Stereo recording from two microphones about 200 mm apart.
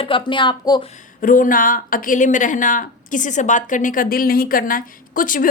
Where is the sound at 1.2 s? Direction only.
45° left (ahead or behind).